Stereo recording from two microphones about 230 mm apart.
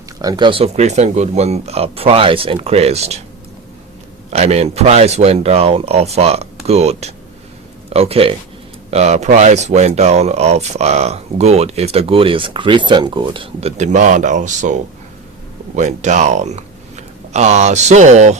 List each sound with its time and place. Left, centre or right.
0.2 s speech: centre
4.3 s speech: right